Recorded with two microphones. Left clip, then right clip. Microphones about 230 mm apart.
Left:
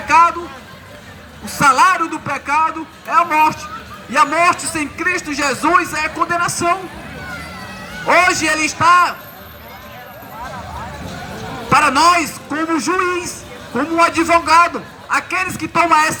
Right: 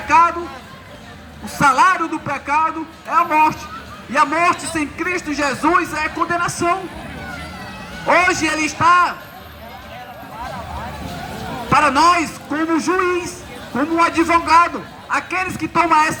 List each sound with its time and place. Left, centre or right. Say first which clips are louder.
0.1 s a sound: left 2 dB; left
1.5 s a man's voice: left 2 dB; left
8.0 s a man's voice: left 2 dB; left
11.7 s a man's voice: left 2 dB; left